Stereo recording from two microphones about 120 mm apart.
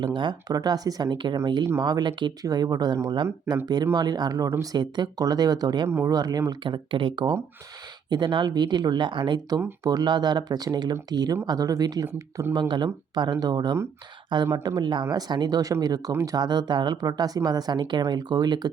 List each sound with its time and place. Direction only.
0.0 s speech: 40° right (ahead or behind)
9.6 s speech: 20° right (ahead or behind)
9.9 s speech: 35° right (ahead or behind)
12.0 s speech: 20° right (ahead or behind)
12.5 s speech: 40° right (ahead or behind)